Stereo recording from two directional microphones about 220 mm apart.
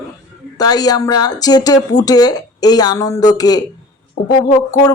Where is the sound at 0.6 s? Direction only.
15° left (ahead or behind).